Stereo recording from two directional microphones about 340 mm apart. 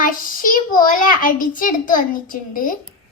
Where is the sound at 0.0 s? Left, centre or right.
Left.